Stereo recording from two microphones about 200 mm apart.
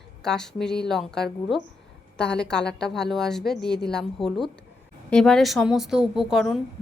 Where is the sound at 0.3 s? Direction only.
5° left (ahead or behind).